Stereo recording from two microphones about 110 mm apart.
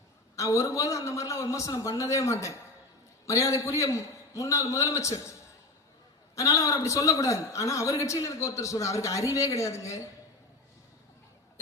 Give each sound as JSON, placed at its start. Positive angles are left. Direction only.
{"t": 0.3, "sound": "a man's voice", "side_deg": 30}